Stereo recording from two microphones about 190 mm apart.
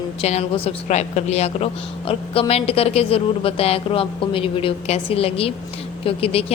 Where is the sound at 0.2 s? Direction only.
35° left (ahead or behind).